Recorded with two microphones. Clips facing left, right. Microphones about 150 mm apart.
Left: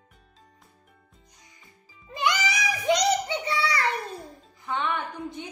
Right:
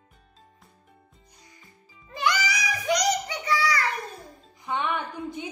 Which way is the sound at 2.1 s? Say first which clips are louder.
Even; 20° left (ahead or behind).